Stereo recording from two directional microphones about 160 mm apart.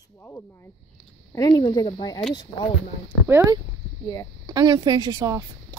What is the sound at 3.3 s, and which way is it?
Speech, 15° right (ahead or behind).